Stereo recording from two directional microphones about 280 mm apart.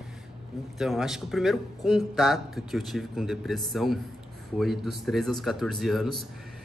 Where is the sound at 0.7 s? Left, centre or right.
Centre.